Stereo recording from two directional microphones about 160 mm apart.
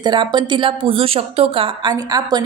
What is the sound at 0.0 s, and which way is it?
A woman's voice, 30° right (ahead or behind).